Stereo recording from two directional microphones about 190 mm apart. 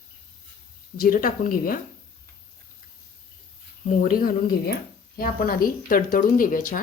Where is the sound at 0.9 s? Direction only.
50° left (ahead or behind).